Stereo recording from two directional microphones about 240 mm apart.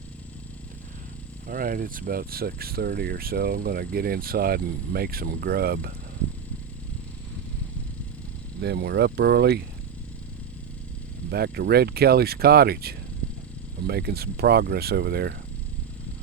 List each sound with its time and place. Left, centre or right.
1.5 s speech: right
8.6 s speech: right
11.3 s speech: right